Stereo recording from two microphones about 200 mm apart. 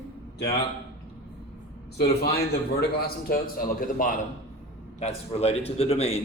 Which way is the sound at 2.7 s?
50° left (ahead or behind).